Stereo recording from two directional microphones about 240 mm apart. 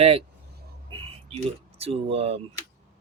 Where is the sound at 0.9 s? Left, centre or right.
Right.